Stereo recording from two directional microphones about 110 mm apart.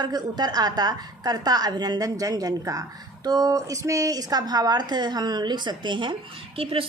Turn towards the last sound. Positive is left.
turn(degrees=-60)  # may be behind; listen again after turning